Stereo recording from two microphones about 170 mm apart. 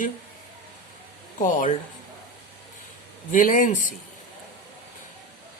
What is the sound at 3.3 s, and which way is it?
Speech, 50° left (ahead or behind).